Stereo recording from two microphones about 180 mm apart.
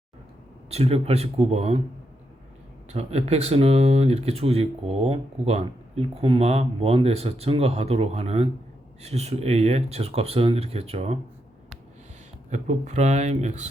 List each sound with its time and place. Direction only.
0.7 s speech: 35° right (ahead or behind)
2.9 s speech: 35° right (ahead or behind)
12.5 s speech: 40° right (ahead or behind)